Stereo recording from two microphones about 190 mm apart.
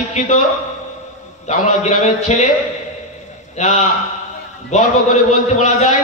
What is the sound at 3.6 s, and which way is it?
A man's voice, 35° left (ahead or behind).